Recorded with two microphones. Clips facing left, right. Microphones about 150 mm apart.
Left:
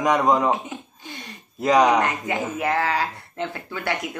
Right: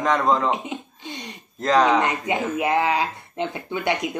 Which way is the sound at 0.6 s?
20° right (ahead or behind).